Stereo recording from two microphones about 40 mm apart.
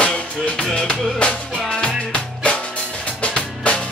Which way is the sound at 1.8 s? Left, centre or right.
Left.